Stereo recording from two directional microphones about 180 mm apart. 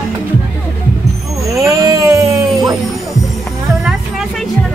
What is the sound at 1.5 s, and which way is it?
Music, 20° right (ahead or behind).